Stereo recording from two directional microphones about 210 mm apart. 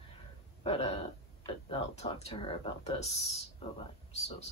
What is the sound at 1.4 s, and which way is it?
Speech, 25° left (ahead or behind).